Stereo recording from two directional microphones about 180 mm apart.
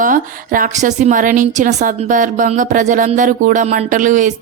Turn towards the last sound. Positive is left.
turn(degrees=-45)  # may be behind; listen again after turning